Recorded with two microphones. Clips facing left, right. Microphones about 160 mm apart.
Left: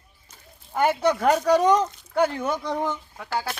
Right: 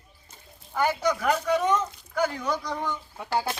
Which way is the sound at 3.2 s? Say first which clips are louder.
Right 2 dB; 15° right (ahead or behind).